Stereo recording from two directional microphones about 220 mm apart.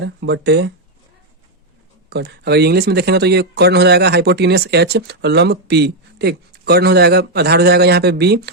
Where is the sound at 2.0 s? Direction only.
50° right (ahead or behind).